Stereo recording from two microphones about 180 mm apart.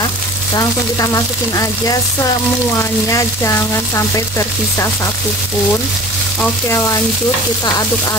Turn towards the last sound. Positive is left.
turn(degrees=15)  # may be behind; listen again after turning